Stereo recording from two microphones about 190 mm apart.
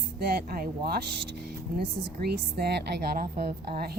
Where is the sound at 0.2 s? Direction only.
50° right (ahead or behind).